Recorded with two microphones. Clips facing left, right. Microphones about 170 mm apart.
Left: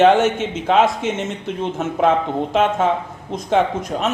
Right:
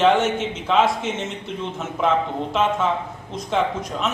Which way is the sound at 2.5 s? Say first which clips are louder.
Left 4 dB; 55° left (ahead or behind).